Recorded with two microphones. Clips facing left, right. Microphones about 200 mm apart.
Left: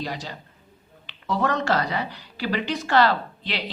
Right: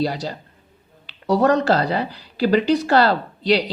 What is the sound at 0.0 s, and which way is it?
Speech, 35° right (ahead or behind).